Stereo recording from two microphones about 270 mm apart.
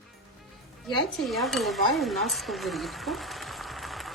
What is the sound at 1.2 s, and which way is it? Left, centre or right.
Speech, centre.